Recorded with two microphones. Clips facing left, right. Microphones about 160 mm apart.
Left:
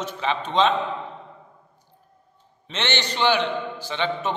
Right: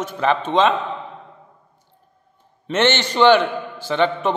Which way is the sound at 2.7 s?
50° right (ahead or behind).